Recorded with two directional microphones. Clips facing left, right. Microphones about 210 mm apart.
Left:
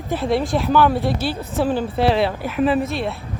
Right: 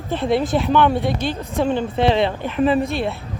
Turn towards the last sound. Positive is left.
turn(degrees=0)  # may be behind; listen again after turning